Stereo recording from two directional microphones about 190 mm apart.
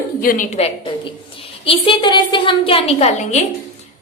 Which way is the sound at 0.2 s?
45° left (ahead or behind).